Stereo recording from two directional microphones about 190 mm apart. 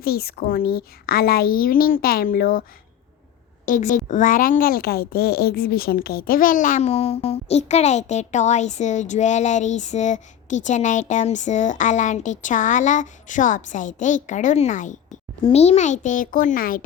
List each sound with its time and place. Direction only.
0.0 s a woman's voice: 55° left (ahead or behind)
3.7 s a woman's voice: 40° left (ahead or behind)